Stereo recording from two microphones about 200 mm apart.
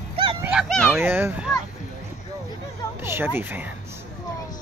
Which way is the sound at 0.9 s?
10° right (ahead or behind).